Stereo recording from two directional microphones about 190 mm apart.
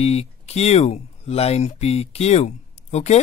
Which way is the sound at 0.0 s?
35° left (ahead or behind).